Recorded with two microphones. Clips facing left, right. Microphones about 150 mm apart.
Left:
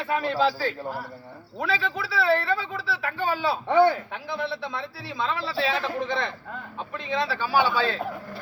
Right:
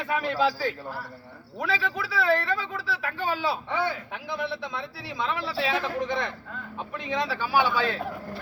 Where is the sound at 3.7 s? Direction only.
45° left (ahead or behind).